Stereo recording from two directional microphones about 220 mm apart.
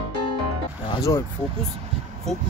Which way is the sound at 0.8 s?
20° left (ahead or behind).